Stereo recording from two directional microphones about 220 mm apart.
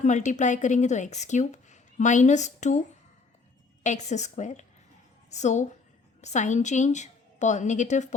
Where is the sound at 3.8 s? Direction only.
30° left (ahead or behind).